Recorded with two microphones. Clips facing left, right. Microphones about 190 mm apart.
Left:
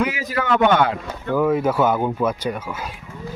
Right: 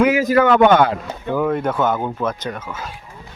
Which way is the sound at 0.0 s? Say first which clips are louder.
Right 9 dB; 45° right (ahead or behind).